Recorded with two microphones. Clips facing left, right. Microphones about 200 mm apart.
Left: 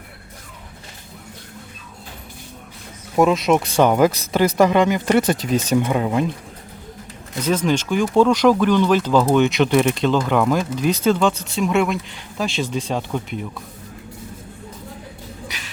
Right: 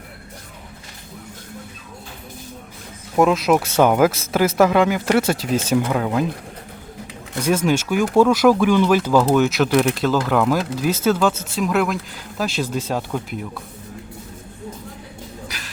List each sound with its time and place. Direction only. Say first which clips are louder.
3.2 s speech: even; centre (ahead or behind)
7.3 s speech: right 1 dB; 10° right (ahead or behind)
15.4 s music: even; centre (ahead or behind)